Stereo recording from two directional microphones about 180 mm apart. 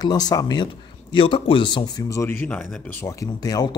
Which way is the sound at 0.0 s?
20° left (ahead or behind).